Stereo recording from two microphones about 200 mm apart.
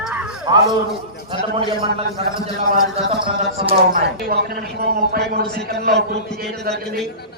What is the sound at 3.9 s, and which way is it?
A man's voice, 50° right (ahead or behind).